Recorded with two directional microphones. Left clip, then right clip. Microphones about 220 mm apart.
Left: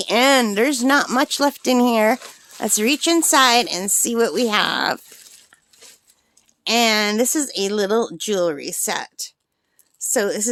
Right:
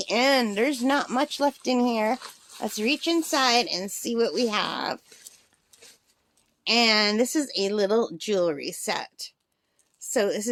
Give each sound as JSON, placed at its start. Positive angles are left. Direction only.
{"t": 0.0, "sound": "speech", "side_deg": 25}
{"t": 6.7, "sound": "a woman's voice", "side_deg": 20}